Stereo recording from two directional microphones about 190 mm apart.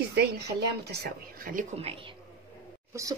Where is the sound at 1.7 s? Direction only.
30° right (ahead or behind).